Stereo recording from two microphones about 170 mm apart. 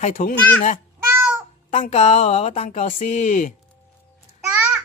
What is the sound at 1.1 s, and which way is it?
Meow, 15° right (ahead or behind).